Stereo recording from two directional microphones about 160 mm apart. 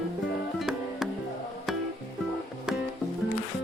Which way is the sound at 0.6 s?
Centre (ahead or behind).